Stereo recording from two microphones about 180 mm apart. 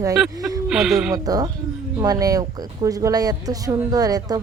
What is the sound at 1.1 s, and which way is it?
Speech, 20° right (ahead or behind).